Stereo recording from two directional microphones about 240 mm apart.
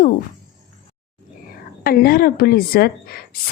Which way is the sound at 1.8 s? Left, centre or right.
Left.